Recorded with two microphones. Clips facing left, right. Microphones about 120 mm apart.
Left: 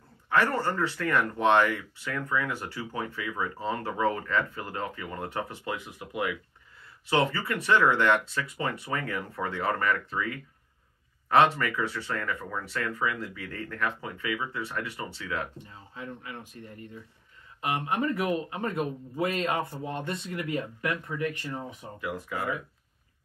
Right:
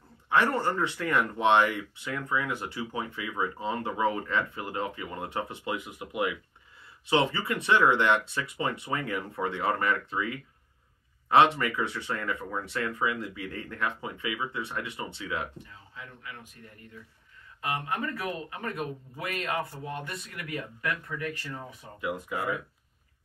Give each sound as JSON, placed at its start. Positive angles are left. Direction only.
{"t": 0.3, "sound": "speech", "side_deg": -20}
{"t": 15.5, "sound": "speech", "side_deg": 30}
{"t": 17.6, "sound": "a man's voice", "side_deg": 20}
{"t": 22.0, "sound": "speech", "side_deg": -20}